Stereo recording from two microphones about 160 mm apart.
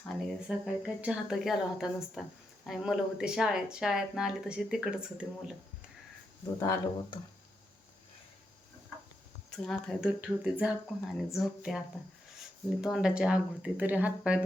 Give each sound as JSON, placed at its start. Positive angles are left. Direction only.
{"t": 0.2, "sound": "speech", "side_deg": 0}
{"t": 6.6, "sound": "speech", "side_deg": 20}
{"t": 9.5, "sound": "speech", "side_deg": 5}
{"t": 12.8, "sound": "speech", "side_deg": -5}